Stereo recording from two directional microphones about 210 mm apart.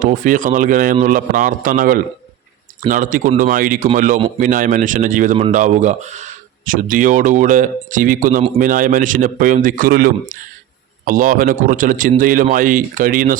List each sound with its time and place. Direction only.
0.0 s speech: 40° right (ahead or behind)